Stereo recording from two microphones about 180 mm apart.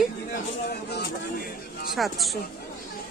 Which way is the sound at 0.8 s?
65° left (ahead or behind).